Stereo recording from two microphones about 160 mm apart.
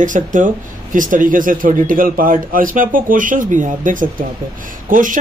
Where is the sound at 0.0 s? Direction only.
55° right (ahead or behind).